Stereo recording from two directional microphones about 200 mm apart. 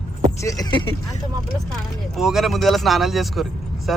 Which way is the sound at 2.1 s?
Centre (ahead or behind).